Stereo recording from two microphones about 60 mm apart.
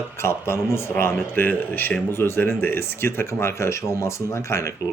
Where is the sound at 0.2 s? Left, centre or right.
Left.